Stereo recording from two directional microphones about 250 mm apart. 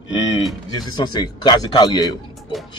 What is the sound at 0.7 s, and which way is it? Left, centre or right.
Speech, centre.